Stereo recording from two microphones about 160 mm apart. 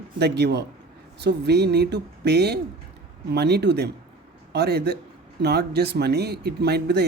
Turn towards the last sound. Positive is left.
turn(degrees=-90)